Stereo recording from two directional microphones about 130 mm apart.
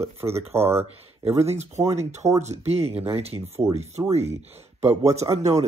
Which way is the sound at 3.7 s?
55° right (ahead or behind).